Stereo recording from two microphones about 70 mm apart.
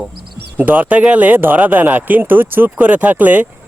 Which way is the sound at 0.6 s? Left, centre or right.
Right.